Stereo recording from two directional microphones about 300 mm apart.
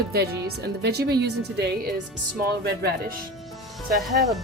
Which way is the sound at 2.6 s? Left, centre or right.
Right.